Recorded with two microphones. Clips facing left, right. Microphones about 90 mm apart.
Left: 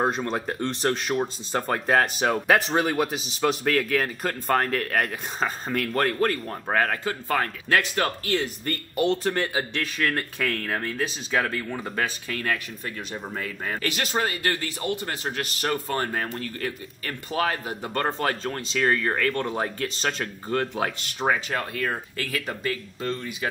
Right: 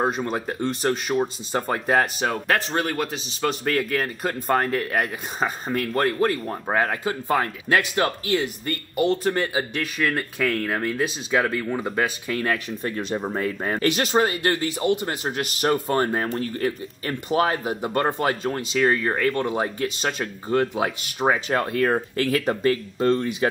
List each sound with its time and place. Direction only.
0.0 s speech: 5° right (ahead or behind)
12.4 s speech: 30° right (ahead or behind); by 21.4 s 10° right (ahead or behind)
21.5 s speech: 35° right (ahead or behind)